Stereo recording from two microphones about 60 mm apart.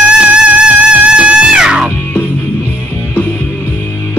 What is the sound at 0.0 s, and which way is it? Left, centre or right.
Music, centre.